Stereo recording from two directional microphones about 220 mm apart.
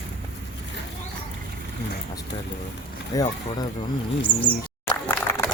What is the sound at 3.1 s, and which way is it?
Speech, 15° left (ahead or behind).